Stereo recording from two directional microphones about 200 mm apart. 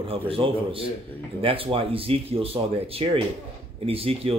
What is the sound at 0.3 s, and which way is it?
Speech, 25° right (ahead or behind).